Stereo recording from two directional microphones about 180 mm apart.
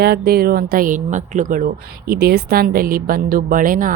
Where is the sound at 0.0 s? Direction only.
60° right (ahead or behind).